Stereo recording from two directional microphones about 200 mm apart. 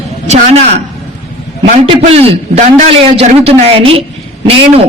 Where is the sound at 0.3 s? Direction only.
35° right (ahead or behind).